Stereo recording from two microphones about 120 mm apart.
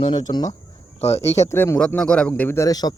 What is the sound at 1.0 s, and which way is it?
Speech, 60° left (ahead or behind).